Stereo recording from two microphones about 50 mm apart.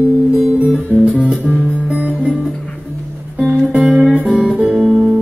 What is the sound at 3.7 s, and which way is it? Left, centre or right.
Music, right.